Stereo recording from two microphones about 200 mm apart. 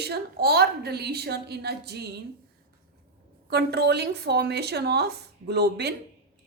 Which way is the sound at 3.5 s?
55° right (ahead or behind).